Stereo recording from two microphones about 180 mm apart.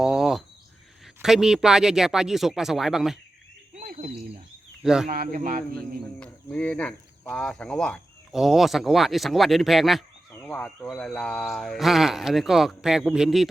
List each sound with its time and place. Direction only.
0.0 s cricket: centre (ahead or behind)
1.0 s speech: centre (ahead or behind)
3.8 s a sound: 45° right (ahead or behind)
4.8 s speech: 5° right (ahead or behind)
5.0 s speech: 50° right (ahead or behind)
5.7 s speech: 5° left (ahead or behind)